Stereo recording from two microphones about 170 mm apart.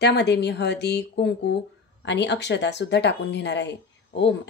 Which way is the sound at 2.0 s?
90° left.